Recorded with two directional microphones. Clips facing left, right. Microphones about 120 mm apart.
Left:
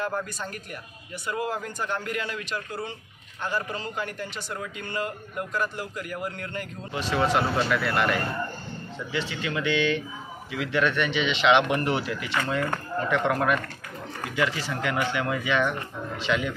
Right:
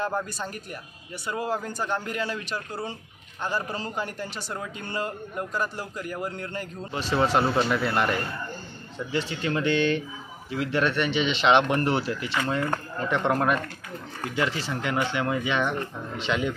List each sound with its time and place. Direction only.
0.0 s a man's voice: 30° right (ahead or behind)
12.7 s speech: 20° right (ahead or behind)